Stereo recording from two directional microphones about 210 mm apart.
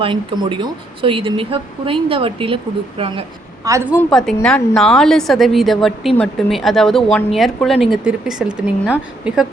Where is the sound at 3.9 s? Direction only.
5° left (ahead or behind).